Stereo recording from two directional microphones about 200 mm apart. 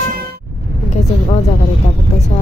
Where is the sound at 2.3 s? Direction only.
35° left (ahead or behind).